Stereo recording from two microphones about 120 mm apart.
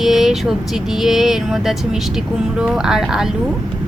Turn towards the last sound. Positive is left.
turn(degrees=-5)  # may be behind; listen again after turning